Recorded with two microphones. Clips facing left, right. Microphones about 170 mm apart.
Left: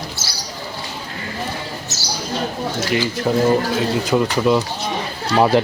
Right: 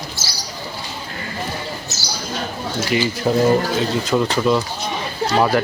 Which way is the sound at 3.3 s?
Centre (ahead or behind).